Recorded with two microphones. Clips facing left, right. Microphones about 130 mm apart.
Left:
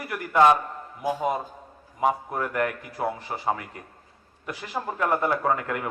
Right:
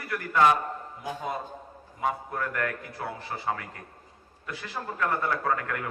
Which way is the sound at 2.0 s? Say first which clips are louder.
Left 5 dB; 20° left (ahead or behind).